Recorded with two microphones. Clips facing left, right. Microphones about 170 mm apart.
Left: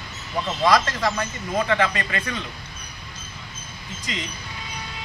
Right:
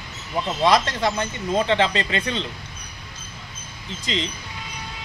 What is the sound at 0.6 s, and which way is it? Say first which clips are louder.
Speech: right 1 dB; 25° right (ahead or behind).